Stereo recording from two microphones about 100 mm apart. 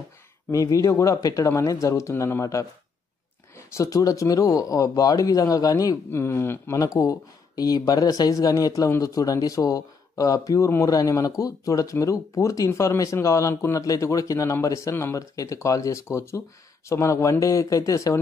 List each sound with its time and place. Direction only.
0.5 s speech: 35° left (ahead or behind)
3.7 s speech: 35° left (ahead or behind)
6.8 s speech: 35° left (ahead or behind)